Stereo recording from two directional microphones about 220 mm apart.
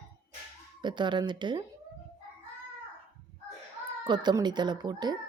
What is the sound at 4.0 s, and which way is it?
Speech, 20° right (ahead or behind).